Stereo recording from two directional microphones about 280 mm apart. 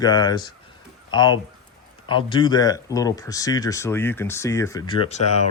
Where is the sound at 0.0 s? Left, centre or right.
Centre.